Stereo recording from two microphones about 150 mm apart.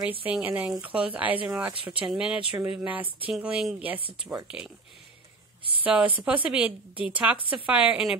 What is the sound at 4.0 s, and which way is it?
Speech, 35° right (ahead or behind).